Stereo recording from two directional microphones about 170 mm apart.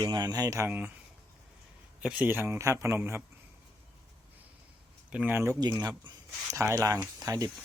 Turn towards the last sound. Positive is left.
turn(degrees=-20)  # may be behind; listen again after turning